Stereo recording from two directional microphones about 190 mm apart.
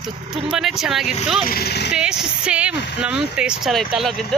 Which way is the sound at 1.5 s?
55° left (ahead or behind).